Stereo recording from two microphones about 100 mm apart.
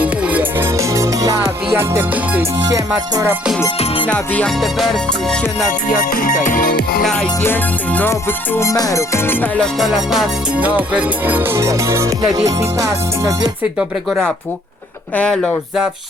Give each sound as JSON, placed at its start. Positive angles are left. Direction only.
{"t": 0.0, "sound": "music", "side_deg": -15}
{"t": 2.6, "sound": "music", "side_deg": -40}
{"t": 4.0, "sound": "music", "side_deg": 15}
{"t": 4.6, "sound": "music", "side_deg": 0}
{"t": 7.0, "sound": "music", "side_deg": 5}
{"t": 7.4, "sound": "music", "side_deg": 15}
{"t": 8.1, "sound": "music", "side_deg": 30}
{"t": 9.6, "sound": "music", "side_deg": 0}
{"t": 15.1, "sound": "music", "side_deg": 10}